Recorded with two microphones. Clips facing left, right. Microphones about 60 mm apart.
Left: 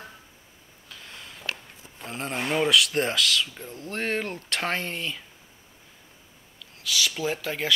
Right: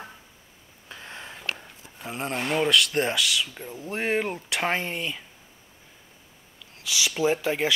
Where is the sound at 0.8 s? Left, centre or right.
Right.